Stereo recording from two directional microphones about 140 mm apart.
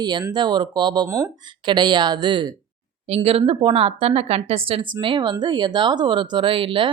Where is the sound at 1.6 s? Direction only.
35° right (ahead or behind).